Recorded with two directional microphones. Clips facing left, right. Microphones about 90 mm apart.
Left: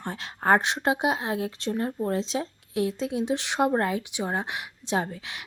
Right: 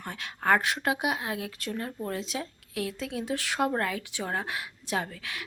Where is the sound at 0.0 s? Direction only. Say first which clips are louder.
Left 3 dB; 30° left (ahead or behind).